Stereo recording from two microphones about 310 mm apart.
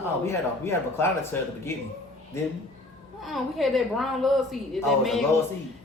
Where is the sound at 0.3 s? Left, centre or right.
Centre.